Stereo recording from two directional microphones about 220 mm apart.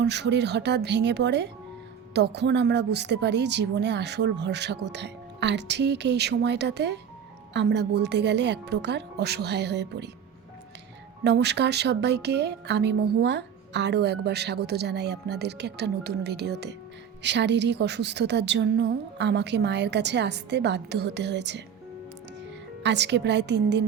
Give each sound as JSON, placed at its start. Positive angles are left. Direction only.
{"t": 0.0, "sound": "speech", "side_deg": -50}
{"t": 11.2, "sound": "speech", "side_deg": -50}
{"t": 22.8, "sound": "speech", "side_deg": -50}